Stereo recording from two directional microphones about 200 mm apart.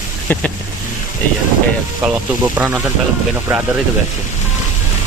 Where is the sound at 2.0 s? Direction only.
10° right (ahead or behind).